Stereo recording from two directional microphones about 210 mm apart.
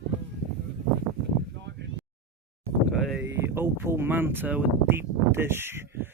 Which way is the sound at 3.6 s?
10° right (ahead or behind).